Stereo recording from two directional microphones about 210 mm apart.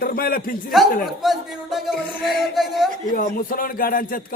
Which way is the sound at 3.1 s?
40° left (ahead or behind).